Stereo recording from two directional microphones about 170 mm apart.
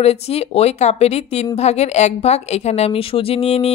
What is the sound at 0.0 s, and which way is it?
Speech, 40° left (ahead or behind).